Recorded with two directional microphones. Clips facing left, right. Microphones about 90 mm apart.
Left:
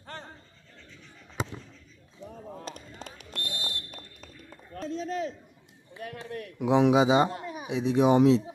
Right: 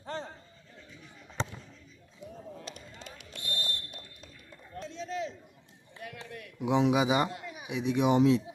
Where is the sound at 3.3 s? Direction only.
75° left (ahead or behind).